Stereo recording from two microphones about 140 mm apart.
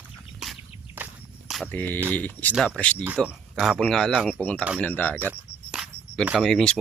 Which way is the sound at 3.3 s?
5° right (ahead or behind).